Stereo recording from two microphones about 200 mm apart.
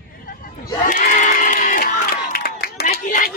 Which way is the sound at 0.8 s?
40° left (ahead or behind).